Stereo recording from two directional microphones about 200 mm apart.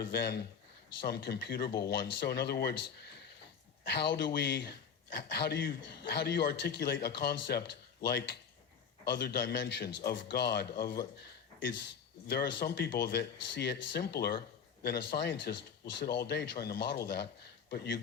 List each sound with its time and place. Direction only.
0.1 s speech: 55° left (ahead or behind)
3.8 s a man's voice: 55° left (ahead or behind)
12.3 s a man's voice: 50° left (ahead or behind)